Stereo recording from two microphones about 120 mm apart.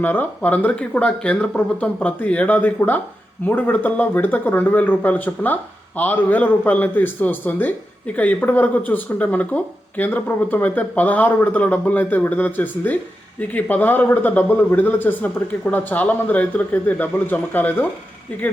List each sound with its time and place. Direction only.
0.0 s a man's voice: 15° left (ahead or behind)